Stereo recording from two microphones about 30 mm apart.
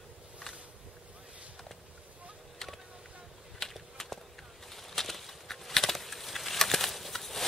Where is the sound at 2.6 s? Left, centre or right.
Centre.